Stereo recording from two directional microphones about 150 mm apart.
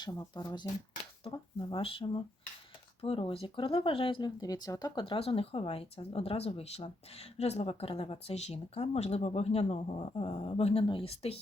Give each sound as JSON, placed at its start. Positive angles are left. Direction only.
{"t": 0.0, "sound": "speech", "side_deg": 25}